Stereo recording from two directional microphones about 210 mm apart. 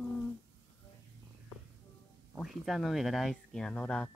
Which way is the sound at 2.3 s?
Centre (ahead or behind).